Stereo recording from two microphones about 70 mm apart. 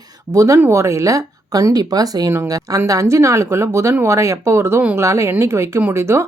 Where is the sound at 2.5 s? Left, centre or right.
Right.